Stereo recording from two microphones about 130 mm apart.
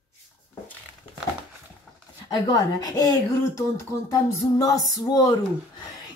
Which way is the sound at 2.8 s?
30° left (ahead or behind).